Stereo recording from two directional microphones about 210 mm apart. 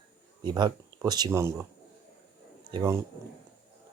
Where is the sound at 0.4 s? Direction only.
20° right (ahead or behind).